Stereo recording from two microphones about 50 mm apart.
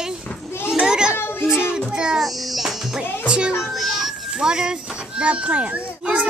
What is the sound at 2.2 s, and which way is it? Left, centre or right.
Music, centre.